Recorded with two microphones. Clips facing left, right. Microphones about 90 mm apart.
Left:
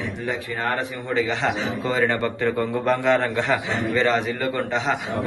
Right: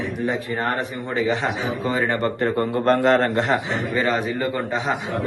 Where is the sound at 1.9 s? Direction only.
20° right (ahead or behind).